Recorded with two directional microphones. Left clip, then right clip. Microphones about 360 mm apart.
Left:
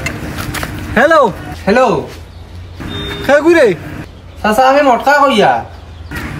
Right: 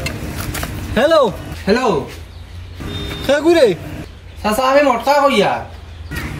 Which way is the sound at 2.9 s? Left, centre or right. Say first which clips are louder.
Left 6 dB; centre.